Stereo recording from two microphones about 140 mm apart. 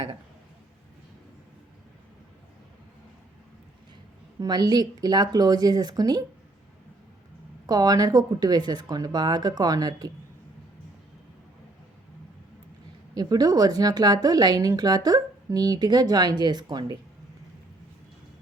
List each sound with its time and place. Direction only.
4.4 s speech: 30° right (ahead or behind)
7.7 s speech: 25° right (ahead or behind)
13.1 s speech: 30° right (ahead or behind)